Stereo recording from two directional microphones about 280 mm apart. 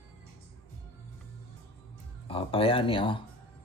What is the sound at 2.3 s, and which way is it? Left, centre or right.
Speech, centre.